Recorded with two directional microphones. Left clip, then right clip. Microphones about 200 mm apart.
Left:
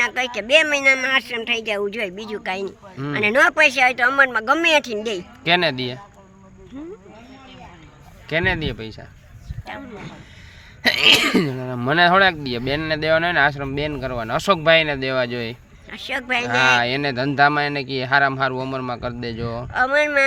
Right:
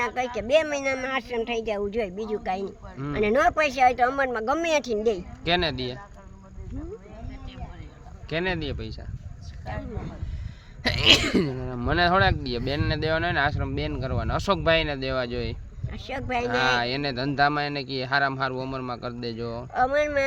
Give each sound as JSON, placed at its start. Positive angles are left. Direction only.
{"t": 0.0, "sound": "speech", "side_deg": -5}
{"t": 5.4, "sound": "speech", "side_deg": 40}
{"t": 8.3, "sound": "speech", "side_deg": 35}
{"t": 9.6, "sound": "speech", "side_deg": -5}
{"t": 10.8, "sound": "speech", "side_deg": 40}
{"t": 15.9, "sound": "speech", "side_deg": -5}
{"t": 16.5, "sound": "speech", "side_deg": 35}
{"t": 19.7, "sound": "speech", "side_deg": -10}